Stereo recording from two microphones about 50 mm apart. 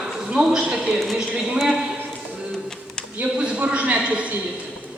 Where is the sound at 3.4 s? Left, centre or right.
Right.